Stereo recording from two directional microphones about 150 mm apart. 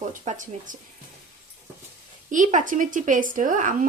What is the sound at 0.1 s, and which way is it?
Speech, 60° right (ahead or behind).